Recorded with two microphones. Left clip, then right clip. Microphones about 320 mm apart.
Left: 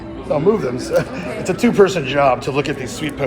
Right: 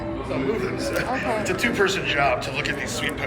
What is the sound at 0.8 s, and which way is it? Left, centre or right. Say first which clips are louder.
Speech: left 5 dB; centre.